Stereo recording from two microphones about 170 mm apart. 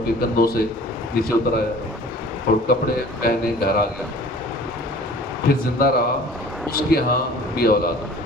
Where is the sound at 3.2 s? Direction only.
60° left (ahead or behind).